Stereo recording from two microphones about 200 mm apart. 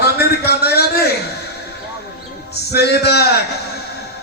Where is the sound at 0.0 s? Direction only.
55° left (ahead or behind).